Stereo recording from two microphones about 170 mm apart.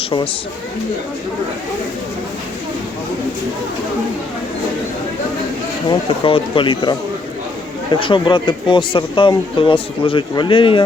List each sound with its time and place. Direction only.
5.9 s a man's voice: 30° left (ahead or behind)